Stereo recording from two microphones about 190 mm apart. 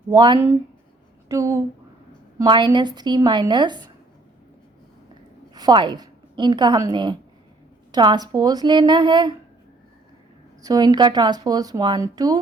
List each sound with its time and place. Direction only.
0.1 s speech: 20° right (ahead or behind)
5.5 s a woman's voice: 20° right (ahead or behind)
10.6 s speech: 20° right (ahead or behind)